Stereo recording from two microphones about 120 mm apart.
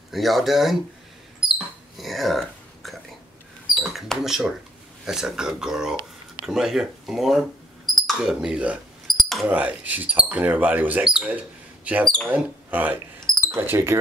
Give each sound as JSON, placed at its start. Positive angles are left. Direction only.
{"t": 0.1, "sound": "speech", "side_deg": 0}
{"t": 2.0, "sound": "whispering", "side_deg": 0}
{"t": 3.9, "sound": "speech", "side_deg": 0}
{"t": 9.0, "sound": "a sound", "side_deg": 0}
{"t": 9.5, "sound": "speech", "side_deg": -15}
{"t": 12.0, "sound": "speech", "side_deg": 5}
{"t": 12.3, "sound": "speech", "side_deg": -15}
{"t": 13.3, "sound": "a sound", "side_deg": 5}
{"t": 13.6, "sound": "speech", "side_deg": -20}